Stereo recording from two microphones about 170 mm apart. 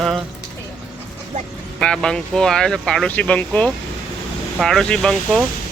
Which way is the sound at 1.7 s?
5° left (ahead or behind).